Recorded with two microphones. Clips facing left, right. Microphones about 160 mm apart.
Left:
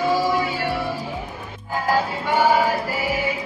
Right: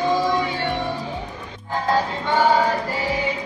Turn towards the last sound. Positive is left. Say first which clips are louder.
# even
turn(degrees=10)  # may be behind; listen again after turning